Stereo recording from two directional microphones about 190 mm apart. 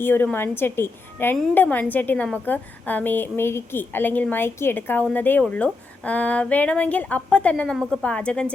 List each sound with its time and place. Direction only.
0.0 s a woman's voice: 10° left (ahead or behind)